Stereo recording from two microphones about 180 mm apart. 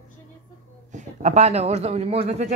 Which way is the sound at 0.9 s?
40° right (ahead or behind).